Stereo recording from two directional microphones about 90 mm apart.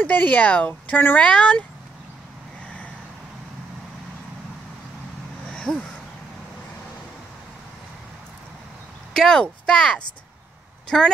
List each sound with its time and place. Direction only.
0.0 s speech: 20° left (ahead or behind)
5.5 s a sound: 10° left (ahead or behind)
9.1 s a woman's voice: 5° left (ahead or behind)